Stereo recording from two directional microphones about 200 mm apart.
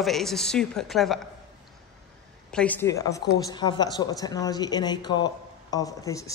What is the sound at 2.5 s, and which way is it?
A man's voice, 10° left (ahead or behind).